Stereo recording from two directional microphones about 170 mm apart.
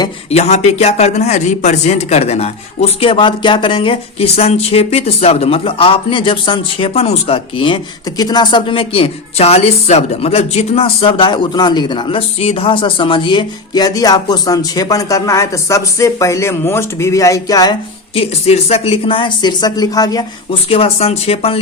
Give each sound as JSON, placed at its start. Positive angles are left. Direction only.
{"t": 0.3, "sound": "speech", "side_deg": 40}